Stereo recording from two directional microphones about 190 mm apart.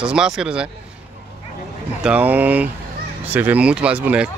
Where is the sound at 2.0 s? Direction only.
5° right (ahead or behind).